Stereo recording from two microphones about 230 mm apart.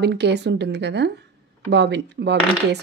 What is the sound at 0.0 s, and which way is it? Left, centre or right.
Speech, right.